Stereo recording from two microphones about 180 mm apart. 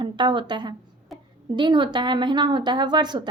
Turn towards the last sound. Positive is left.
turn(degrees=-25)  # may be behind; listen again after turning